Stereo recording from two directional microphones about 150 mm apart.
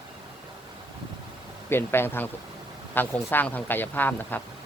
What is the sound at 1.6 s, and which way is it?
Speech, 15° left (ahead or behind).